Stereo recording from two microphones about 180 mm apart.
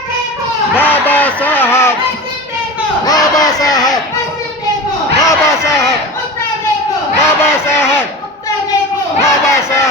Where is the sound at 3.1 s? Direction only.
20° left (ahead or behind).